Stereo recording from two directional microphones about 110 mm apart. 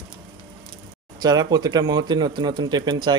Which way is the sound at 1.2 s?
40° right (ahead or behind).